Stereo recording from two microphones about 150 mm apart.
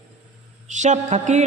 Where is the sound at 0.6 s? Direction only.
50° right (ahead or behind).